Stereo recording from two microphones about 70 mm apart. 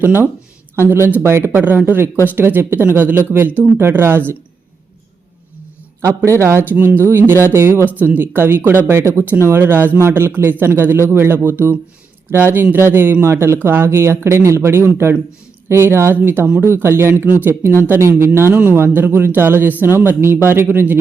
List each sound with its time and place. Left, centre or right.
0.8 s speech: right
6.0 s speech: right
7.9 s speech: right
17.2 s speech: right